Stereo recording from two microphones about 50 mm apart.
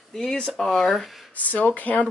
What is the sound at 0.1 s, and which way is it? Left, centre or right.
Speech, centre.